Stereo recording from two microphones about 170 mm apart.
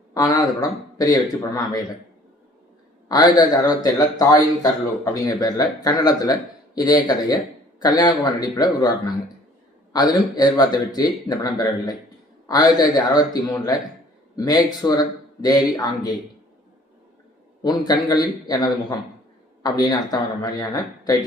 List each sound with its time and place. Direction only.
0.1 s speech: 20° left (ahead or behind)
3.1 s speech: 25° left (ahead or behind)
17.6 s speech: 25° left (ahead or behind)